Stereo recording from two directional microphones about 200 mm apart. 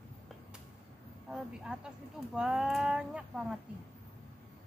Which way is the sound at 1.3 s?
5° right (ahead or behind).